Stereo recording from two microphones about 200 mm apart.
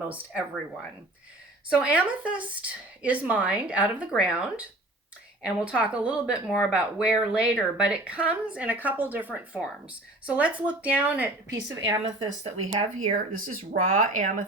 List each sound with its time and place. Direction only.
0.1 s a woman's voice: 5° right (ahead or behind)
1.8 s a woman's voice: 5° right (ahead or behind)
12.0 s speech: 35° right (ahead or behind)